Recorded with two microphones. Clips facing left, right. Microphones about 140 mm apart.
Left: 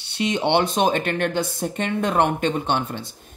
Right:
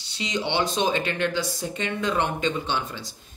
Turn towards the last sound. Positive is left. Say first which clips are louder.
# left 5 dB
turn(degrees=55)  # may be behind; listen again after turning